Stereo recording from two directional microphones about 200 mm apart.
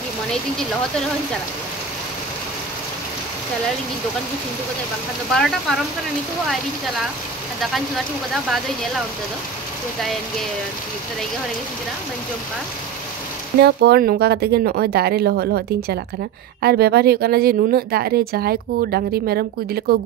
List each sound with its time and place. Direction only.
5.3 s speech: centre (ahead or behind)
8.3 s speech: centre (ahead or behind)
13.6 s speech: 55° right (ahead or behind)